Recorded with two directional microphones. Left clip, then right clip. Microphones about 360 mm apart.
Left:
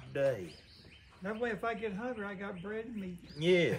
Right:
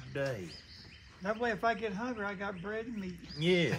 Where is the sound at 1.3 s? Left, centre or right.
Centre.